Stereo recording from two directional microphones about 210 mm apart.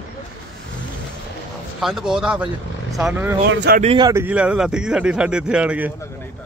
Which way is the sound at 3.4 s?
55° right (ahead or behind).